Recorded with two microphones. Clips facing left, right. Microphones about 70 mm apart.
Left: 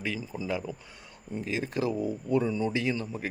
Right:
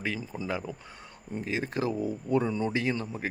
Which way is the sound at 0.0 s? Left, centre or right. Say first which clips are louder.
Even; right.